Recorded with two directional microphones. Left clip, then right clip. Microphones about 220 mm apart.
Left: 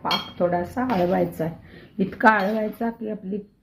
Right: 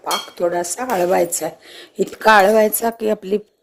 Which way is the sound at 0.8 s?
60° right (ahead or behind).